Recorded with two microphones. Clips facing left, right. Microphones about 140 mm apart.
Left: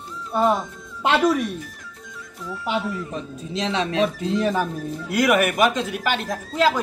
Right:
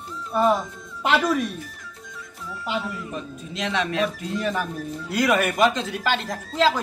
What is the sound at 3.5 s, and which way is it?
Speech, 30° left (ahead or behind).